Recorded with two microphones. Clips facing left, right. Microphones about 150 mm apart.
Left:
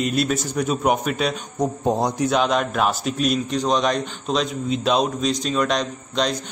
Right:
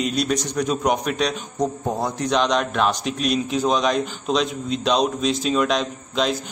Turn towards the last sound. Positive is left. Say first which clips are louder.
# right 1 dB
turn(degrees=-5)  # may be behind; listen again after turning